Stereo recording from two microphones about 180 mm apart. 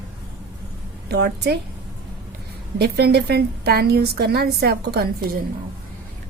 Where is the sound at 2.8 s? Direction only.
60° right (ahead or behind).